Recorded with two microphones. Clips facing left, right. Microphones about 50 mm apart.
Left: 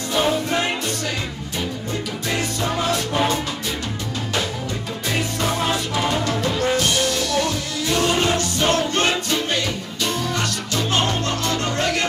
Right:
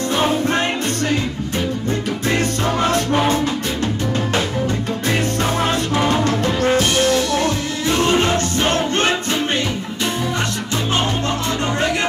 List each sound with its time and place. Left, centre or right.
2.8 s music: right
5.4 s music: right